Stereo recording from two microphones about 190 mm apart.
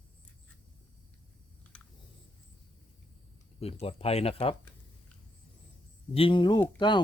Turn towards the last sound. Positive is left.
turn(degrees=25)  # may be behind; listen again after turning